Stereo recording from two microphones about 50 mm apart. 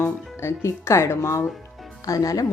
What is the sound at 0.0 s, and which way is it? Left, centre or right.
Speech, left.